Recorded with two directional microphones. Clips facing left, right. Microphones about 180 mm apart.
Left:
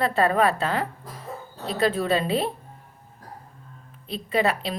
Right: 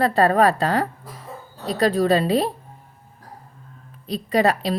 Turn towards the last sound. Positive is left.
turn(degrees=-40)  # may be behind; listen again after turning